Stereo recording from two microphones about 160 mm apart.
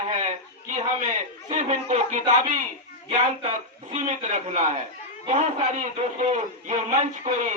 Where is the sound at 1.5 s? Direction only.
45° right (ahead or behind).